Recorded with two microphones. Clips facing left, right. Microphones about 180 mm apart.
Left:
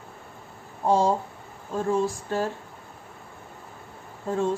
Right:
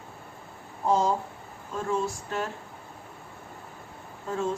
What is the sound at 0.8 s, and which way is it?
Speech, 30° left (ahead or behind).